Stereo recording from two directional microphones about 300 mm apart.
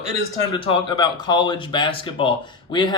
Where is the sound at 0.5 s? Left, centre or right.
Centre.